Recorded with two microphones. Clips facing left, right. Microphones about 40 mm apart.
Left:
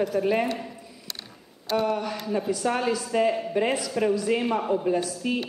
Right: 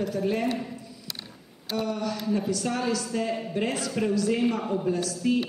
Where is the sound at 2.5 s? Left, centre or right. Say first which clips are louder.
Left 2 dB; centre.